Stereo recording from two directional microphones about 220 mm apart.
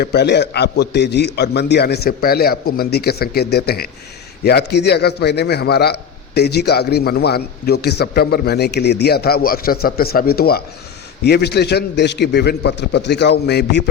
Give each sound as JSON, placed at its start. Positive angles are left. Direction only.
{"t": 0.0, "sound": "a man's voice", "side_deg": 50}